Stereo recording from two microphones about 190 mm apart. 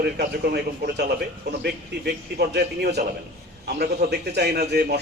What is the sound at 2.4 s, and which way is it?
A man's voice, 60° right (ahead or behind).